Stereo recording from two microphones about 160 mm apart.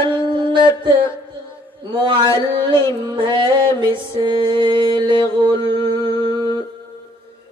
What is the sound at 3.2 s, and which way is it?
Mantra, 30° right (ahead or behind).